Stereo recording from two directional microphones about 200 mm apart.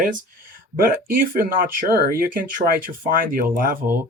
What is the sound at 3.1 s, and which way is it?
Speech, 45° right (ahead or behind).